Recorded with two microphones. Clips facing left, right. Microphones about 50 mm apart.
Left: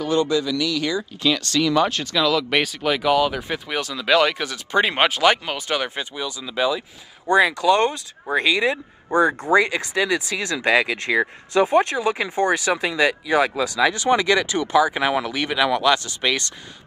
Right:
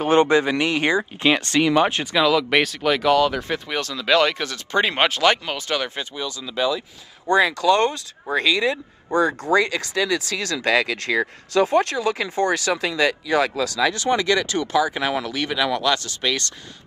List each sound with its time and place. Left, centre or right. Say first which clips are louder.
0.0 s speech: right 4 dB; right
2.2 s speech: right 2 dB; centre
2.6 s speech: right 1 dB; centre